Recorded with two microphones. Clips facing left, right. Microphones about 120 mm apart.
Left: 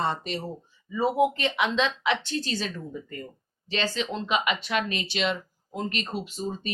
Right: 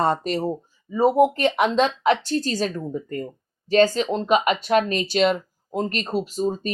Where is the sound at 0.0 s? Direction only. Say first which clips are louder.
Right 7 dB; 45° right (ahead or behind).